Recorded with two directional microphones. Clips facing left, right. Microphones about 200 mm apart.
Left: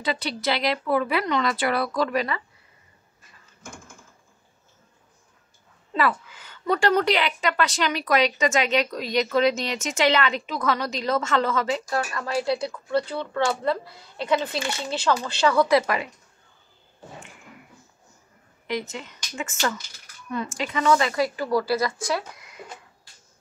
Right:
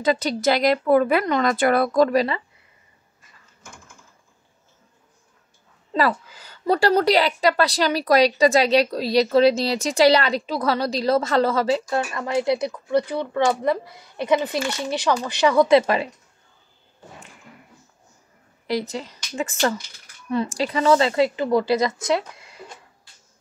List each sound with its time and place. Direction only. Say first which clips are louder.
0.0 s speech: right 7 dB; 45° right (ahead or behind)
5.9 s a woman's voice: right 3 dB; 35° right (ahead or behind); by 15.8 s 15° right (ahead or behind)
18.7 s a woman's voice: right 4 dB; 35° right (ahead or behind)